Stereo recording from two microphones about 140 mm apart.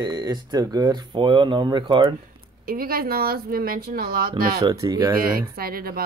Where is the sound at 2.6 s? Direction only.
90° right.